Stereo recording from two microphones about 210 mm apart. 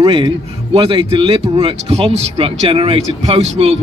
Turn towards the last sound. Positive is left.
turn(degrees=-30)  # may be behind; listen again after turning